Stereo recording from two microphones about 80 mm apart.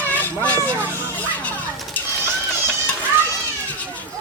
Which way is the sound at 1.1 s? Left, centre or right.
Centre.